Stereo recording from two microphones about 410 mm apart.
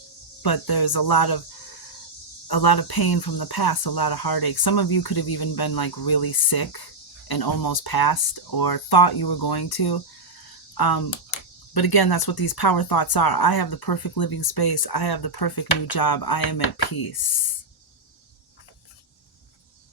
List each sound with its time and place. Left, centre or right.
0.4 s speech: left
2.5 s speech: left